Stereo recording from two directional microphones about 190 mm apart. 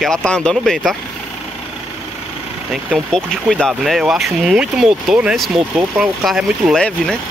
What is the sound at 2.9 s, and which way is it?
Speech, centre (ahead or behind).